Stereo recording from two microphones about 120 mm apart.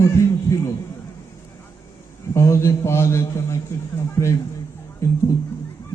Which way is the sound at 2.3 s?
25° left (ahead or behind).